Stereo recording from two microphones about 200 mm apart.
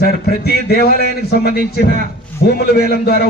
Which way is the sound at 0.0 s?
50° left (ahead or behind).